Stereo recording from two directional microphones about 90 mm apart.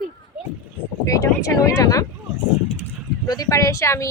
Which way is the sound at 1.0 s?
40° left (ahead or behind).